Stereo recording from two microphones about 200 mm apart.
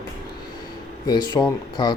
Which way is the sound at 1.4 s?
20° left (ahead or behind).